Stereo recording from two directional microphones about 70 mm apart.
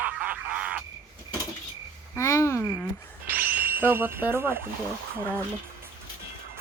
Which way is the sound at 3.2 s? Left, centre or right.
Right.